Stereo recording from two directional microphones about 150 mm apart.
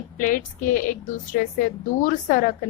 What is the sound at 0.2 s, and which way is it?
A woman's voice, 65° left (ahead or behind).